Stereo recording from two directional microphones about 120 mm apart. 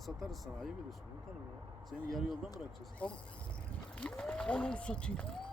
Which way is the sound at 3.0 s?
10° left (ahead or behind).